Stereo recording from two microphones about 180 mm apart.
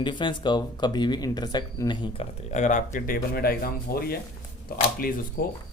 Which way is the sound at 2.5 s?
40° left (ahead or behind).